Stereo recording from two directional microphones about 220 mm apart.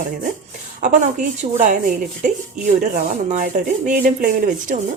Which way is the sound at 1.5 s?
35° right (ahead or behind).